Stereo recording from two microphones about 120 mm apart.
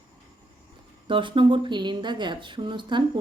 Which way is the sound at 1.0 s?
45° right (ahead or behind).